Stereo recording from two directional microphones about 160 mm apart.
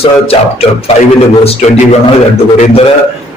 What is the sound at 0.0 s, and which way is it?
Music, 35° left (ahead or behind).